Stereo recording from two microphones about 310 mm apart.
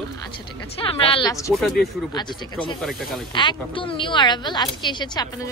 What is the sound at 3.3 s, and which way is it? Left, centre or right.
A woman's voice, centre.